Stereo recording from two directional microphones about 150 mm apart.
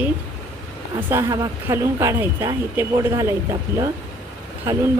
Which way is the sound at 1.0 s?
20° right (ahead or behind).